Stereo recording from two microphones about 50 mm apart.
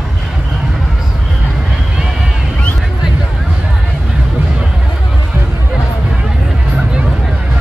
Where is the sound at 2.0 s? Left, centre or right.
Centre.